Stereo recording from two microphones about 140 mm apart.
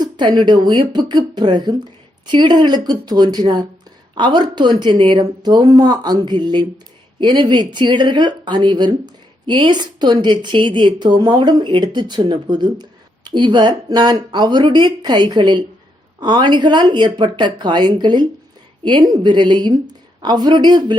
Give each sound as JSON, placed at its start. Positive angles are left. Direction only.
{"t": 0.0, "sound": "speech", "side_deg": -30}